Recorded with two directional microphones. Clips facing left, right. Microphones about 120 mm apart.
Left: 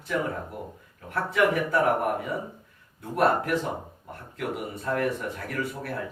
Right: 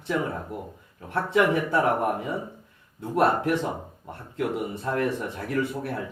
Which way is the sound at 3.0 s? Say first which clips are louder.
Right 1 dB; 25° right (ahead or behind).